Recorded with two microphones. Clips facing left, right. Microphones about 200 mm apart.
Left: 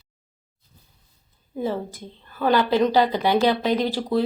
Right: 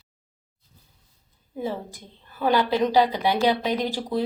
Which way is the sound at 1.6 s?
15° right (ahead or behind).